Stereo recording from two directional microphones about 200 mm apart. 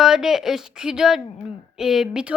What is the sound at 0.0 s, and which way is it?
A woman's voice, centre (ahead or behind).